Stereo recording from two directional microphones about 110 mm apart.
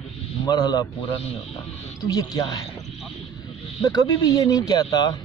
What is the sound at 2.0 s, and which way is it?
Speech, 35° left (ahead or behind).